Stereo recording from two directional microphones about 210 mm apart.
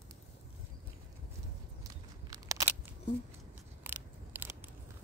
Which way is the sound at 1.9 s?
15° right (ahead or behind).